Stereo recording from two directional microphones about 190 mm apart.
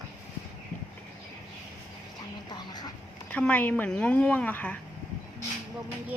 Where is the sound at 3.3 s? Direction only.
5° left (ahead or behind).